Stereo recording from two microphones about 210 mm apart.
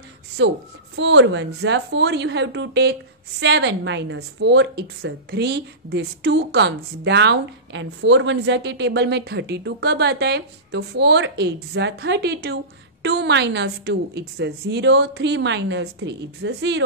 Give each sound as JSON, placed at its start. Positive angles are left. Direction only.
{"t": 0.4, "sound": "a woman's voice", "side_deg": -60}